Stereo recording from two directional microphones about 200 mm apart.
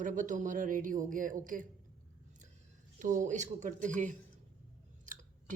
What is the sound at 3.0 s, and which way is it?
Speech, 40° right (ahead or behind).